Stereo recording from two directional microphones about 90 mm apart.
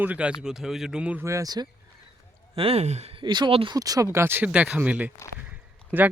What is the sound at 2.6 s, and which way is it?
Speech, 90° right.